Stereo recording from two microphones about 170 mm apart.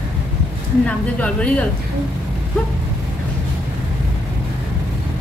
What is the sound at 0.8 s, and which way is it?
Speech, 5° left (ahead or behind).